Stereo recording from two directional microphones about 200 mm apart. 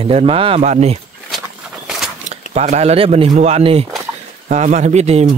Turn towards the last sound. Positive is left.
turn(degrees=-30)  # may be behind; listen again after turning